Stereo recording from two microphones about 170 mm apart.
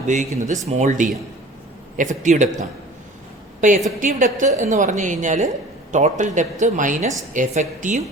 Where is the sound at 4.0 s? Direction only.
50° right (ahead or behind).